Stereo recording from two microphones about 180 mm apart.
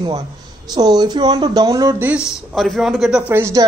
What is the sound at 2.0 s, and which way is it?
Speech, 5° right (ahead or behind).